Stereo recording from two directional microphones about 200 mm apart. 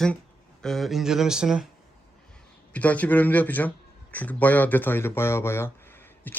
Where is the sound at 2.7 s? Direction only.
5° left (ahead or behind).